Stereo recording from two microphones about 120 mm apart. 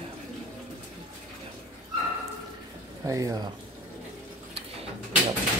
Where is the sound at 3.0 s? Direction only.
30° right (ahead or behind).